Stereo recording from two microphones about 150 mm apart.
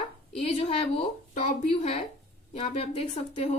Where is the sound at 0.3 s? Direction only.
45° left (ahead or behind).